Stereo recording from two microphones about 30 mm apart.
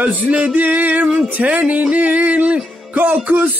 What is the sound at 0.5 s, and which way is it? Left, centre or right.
Music, right.